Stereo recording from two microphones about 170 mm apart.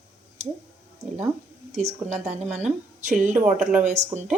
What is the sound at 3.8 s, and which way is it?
Speech, 40° right (ahead or behind).